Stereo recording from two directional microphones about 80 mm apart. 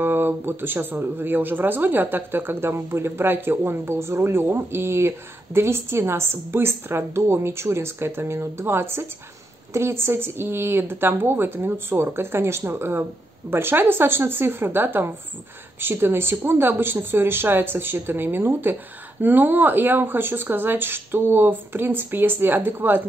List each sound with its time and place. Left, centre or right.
0.0 s speech: right